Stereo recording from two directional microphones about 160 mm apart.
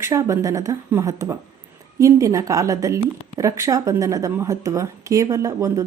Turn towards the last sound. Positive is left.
turn(degrees=-20)  # may be behind; listen again after turning